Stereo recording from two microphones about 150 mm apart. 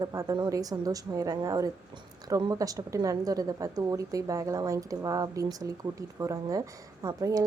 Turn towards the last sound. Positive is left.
turn(degrees=-25)  # may be behind; listen again after turning